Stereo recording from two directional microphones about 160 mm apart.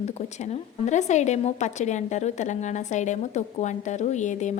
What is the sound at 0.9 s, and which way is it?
A woman's voice, 45° left (ahead or behind).